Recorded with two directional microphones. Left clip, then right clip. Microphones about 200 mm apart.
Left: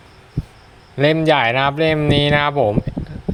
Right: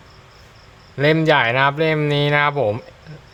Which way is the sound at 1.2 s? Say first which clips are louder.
Right 1 dB; 15° left (ahead or behind).